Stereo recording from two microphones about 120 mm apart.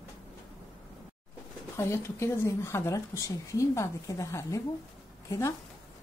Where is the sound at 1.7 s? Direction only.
20° left (ahead or behind).